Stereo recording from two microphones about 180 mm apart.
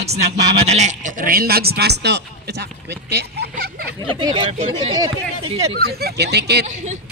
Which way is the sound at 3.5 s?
60° right (ahead or behind).